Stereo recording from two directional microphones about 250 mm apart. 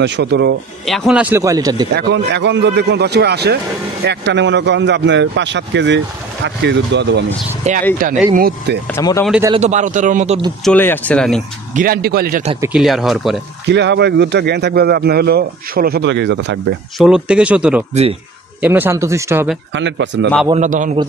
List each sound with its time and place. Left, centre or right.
0.0 s a man's voice: right
0.8 s speech: centre
2.0 s a man's voice: right
7.7 s speech: right
8.9 s speech: centre
9.5 s speech: right
10.6 s speech: centre
11.7 s speech: right
12.5 s speech: centre
13.7 s a man's voice: right
17.0 s speech: centre
19.7 s a man's voice: right
20.4 s speech: right